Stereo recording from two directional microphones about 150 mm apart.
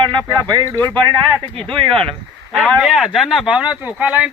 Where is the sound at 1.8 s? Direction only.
35° right (ahead or behind).